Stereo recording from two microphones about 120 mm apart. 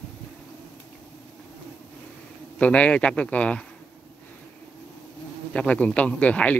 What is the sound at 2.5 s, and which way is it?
Speech, 10° left (ahead or behind).